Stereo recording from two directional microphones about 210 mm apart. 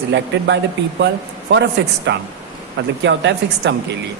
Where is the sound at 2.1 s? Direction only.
55° right (ahead or behind).